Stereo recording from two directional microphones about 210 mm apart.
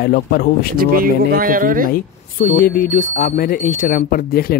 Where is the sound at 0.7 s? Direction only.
45° right (ahead or behind).